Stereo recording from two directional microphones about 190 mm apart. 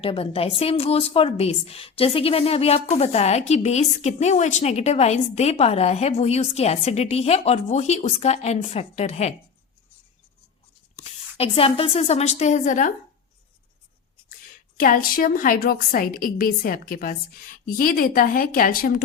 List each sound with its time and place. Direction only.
0.0 s a woman's voice: 30° left (ahead or behind)
11.0 s speech: 30° left (ahead or behind)
14.8 s a woman's voice: 45° left (ahead or behind)